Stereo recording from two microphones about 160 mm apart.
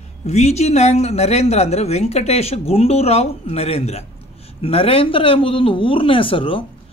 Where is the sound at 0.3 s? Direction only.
45° left (ahead or behind).